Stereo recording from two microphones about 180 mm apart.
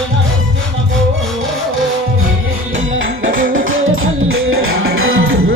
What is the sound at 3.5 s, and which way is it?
Music, 90° right.